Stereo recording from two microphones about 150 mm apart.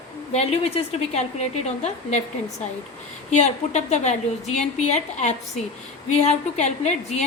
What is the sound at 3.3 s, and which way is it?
A woman's voice, 50° left (ahead or behind).